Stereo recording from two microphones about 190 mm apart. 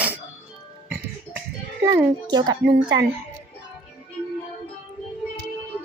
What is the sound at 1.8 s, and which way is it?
A child's voice, 20° right (ahead or behind).